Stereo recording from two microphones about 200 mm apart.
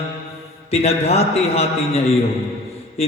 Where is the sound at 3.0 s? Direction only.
30° left (ahead or behind).